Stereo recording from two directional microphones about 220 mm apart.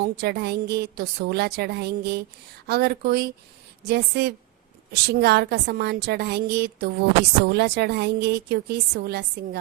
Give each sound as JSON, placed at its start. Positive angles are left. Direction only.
{"t": 0.0, "sound": "a woman's voice", "side_deg": -50}